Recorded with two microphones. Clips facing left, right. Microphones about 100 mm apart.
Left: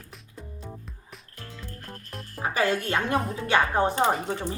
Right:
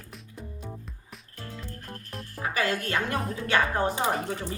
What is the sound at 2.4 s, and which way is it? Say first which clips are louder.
A woman's voice: left 3 dB; 25° left (ahead or behind).